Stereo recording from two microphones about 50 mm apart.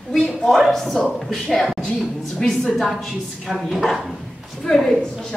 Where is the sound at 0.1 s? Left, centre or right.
Centre.